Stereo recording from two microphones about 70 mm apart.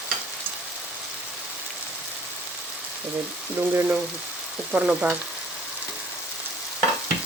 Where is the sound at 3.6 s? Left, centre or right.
Right.